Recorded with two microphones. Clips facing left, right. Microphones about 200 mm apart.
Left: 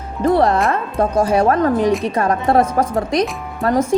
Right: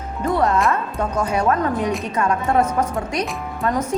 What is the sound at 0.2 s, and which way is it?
A woman's voice, 30° left (ahead or behind).